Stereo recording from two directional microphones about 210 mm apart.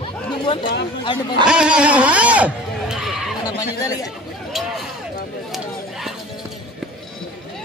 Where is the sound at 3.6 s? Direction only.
15° left (ahead or behind).